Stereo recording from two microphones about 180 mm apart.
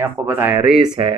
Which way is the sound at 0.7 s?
25° right (ahead or behind).